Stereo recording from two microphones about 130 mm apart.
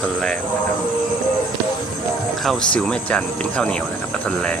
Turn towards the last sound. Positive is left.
turn(degrees=10)  # may be behind; listen again after turning